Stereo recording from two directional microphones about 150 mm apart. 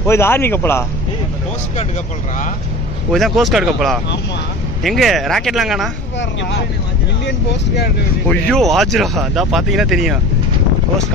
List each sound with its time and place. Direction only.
0.0 s speech: 15° left (ahead or behind)
3.1 s speech: centre (ahead or behind)
8.3 s speech: 5° left (ahead or behind)